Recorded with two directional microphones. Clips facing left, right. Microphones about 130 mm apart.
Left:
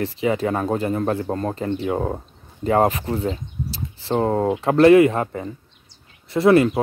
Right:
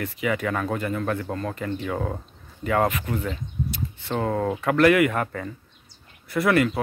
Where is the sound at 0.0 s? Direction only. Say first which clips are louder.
Left 5 dB; 30° left (ahead or behind).